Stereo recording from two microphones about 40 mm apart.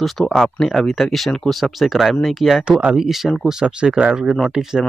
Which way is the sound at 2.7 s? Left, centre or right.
Right.